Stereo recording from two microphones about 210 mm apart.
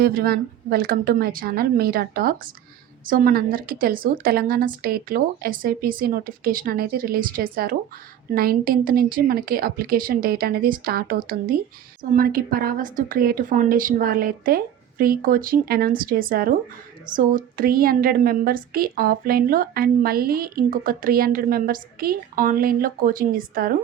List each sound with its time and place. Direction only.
0.0 s a woman's voice: 45° right (ahead or behind)